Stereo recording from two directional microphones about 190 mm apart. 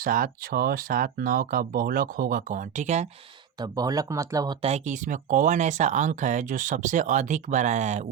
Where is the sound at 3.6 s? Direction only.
20° right (ahead or behind).